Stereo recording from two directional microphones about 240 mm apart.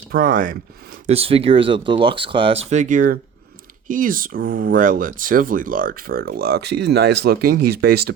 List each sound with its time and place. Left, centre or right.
0.1 s speech: right
1.0 s speech: right